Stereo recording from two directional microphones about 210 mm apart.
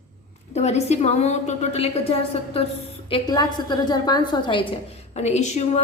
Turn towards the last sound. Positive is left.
turn(degrees=30)  # may be behind; listen again after turning